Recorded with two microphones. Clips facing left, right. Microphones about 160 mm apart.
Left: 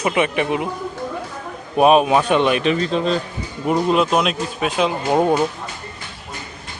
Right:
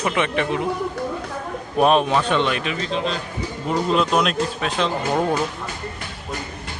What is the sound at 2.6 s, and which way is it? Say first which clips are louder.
Speech: left 6 dB; 40° left (ahead or behind).